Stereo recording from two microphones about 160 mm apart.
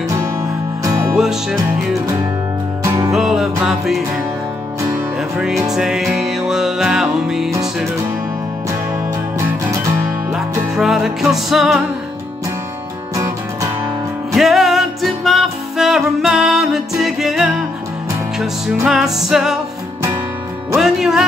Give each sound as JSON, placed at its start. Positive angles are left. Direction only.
{"t": 0.8, "sound": "music", "side_deg": -15}
{"t": 1.1, "sound": "music", "side_deg": -5}
{"t": 3.1, "sound": "music", "side_deg": -5}
{"t": 10.3, "sound": "music", "side_deg": 0}
{"t": 13.1, "sound": "music", "side_deg": -20}
{"t": 14.3, "sound": "music", "side_deg": 0}
{"t": 18.9, "sound": "music", "side_deg": 0}
{"t": 20.7, "sound": "music", "side_deg": 0}